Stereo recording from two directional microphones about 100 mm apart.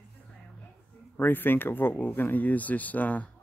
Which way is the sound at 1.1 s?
20° left (ahead or behind).